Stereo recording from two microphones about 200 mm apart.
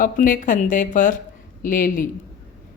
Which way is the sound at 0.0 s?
40° left (ahead or behind).